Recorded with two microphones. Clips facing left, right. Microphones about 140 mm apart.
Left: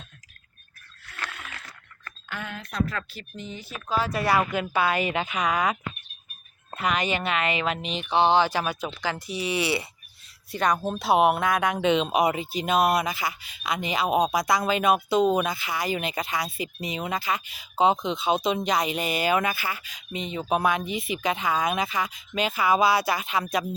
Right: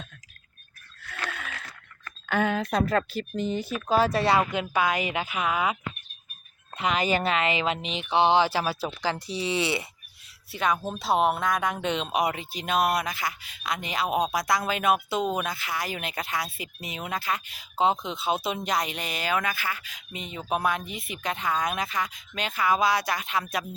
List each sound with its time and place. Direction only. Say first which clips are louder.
2.2 s speech: right 11 dB; 70° right (ahead or behind)
3.1 s a woman's voice: right 10 dB; 40° right (ahead or behind); by 4.6 s 25° right (ahead or behind)
4.6 s speech: left 1 dB; 10° right (ahead or behind)
6.7 s a woman's voice: right 1 dB; 25° right (ahead or behind)
10.5 s speech: left 2 dB; 5° right (ahead or behind)